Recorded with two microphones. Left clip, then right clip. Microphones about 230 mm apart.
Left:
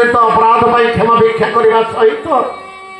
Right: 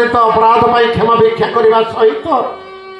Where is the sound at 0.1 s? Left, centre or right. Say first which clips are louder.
Even; right.